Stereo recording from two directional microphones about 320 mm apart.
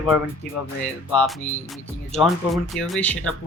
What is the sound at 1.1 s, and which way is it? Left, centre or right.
Speech, centre.